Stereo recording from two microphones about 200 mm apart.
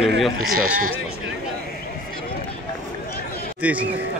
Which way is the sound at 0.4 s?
45° right (ahead or behind).